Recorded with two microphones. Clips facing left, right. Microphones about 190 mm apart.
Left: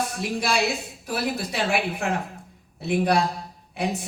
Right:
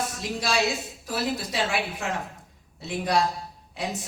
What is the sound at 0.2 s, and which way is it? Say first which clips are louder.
A man's voice: left 1 dB; 55° left (ahead or behind).